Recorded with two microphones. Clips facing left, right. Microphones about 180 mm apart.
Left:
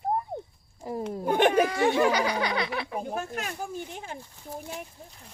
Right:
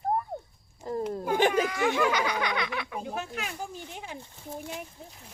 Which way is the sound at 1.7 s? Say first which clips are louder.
Left 3 dB; 30° left (ahead or behind).